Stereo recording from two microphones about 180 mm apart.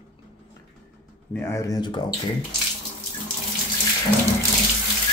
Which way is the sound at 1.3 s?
15° left (ahead or behind).